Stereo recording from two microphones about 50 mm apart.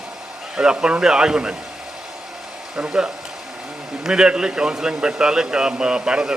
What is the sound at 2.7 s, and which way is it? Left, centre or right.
Speech, centre.